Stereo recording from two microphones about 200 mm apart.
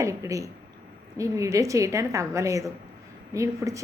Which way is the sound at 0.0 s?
15° right (ahead or behind).